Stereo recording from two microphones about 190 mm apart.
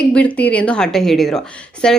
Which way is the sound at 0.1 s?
5° left (ahead or behind).